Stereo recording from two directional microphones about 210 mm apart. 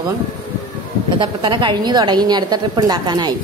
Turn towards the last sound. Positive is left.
turn(degrees=-20)  # may be behind; listen again after turning